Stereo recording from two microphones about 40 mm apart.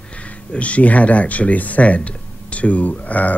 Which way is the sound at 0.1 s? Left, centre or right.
Left.